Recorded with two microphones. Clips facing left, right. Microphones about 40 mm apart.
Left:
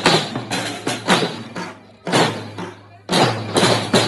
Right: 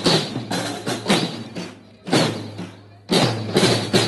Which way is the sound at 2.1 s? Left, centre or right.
Left.